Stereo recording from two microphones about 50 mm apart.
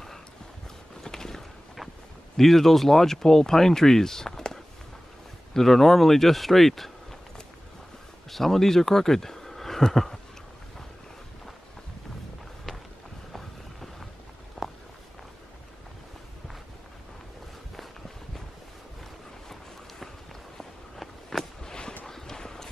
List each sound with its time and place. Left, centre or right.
1.0 s a sound: centre
2.3 s speech: centre
8.3 s speech: centre
13.3 s boat: centre
14.6 s walk: centre
20.5 s walk: centre
21.6 s a sound: centre
22.0 s clip-clop: centre